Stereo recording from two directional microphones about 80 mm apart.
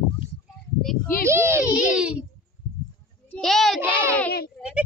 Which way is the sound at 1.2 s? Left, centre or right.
Right.